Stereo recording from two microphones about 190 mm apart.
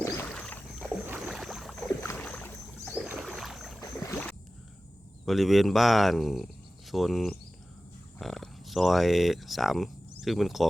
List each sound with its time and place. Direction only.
0.3 s rowboat: 5° left (ahead or behind)
1.0 s rowboat: 5° right (ahead or behind); by 3.0 s 10° left (ahead or behind)
3.0 s rowboat: 5° right (ahead or behind)
3.8 s boat: 15° left (ahead or behind)
5.2 s speech: centre (ahead or behind)